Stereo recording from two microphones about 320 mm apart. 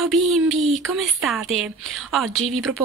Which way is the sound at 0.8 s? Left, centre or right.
Centre.